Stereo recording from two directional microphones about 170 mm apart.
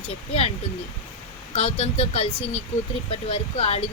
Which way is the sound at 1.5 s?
35° left (ahead or behind).